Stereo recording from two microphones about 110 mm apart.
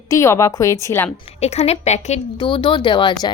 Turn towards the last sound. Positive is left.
turn(degrees=45)  # may be behind; listen again after turning